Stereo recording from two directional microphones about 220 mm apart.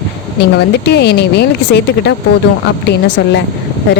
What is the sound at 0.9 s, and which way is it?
Speech, 50° left (ahead or behind).